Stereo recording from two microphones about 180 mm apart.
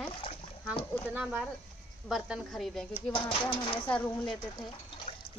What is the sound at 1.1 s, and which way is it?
Speech, 5° right (ahead or behind).